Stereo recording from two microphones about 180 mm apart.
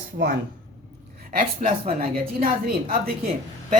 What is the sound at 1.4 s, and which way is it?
Speech, 50° right (ahead or behind).